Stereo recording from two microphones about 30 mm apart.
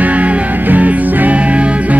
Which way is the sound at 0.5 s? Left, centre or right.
Right.